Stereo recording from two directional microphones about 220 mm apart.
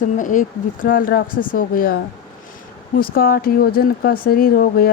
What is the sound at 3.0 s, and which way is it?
Speech, 40° left (ahead or behind).